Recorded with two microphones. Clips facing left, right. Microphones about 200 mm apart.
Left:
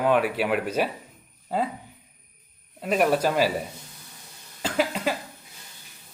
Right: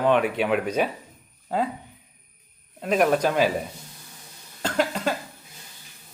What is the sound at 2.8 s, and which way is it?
Speech, 5° left (ahead or behind).